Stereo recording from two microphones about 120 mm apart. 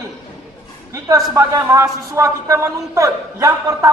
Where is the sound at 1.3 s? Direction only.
25° right (ahead or behind).